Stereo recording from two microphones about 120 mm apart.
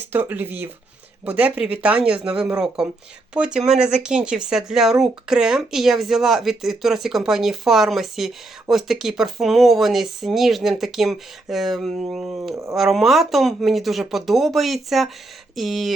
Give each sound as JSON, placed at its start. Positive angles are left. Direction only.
{"t": 0.1, "sound": "speech", "side_deg": -15}